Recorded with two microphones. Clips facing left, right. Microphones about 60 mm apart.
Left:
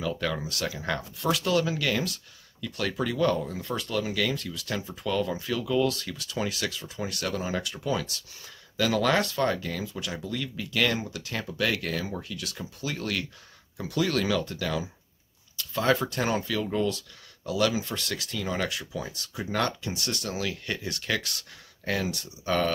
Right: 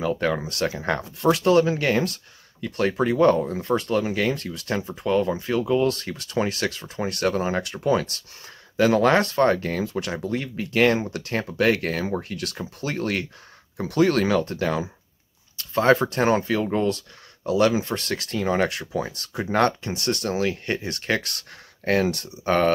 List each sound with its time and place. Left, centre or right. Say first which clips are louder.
0.0 s speech: right 6 dB; right